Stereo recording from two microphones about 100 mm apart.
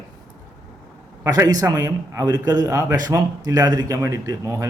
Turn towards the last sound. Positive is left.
turn(degrees=-35)  # may be behind; listen again after turning